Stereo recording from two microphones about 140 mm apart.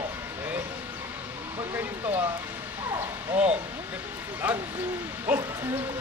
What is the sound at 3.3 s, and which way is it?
Speech, 10° right (ahead or behind).